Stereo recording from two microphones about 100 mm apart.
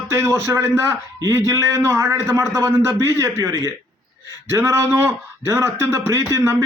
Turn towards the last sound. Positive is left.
turn(degrees=-25)  # may be behind; listen again after turning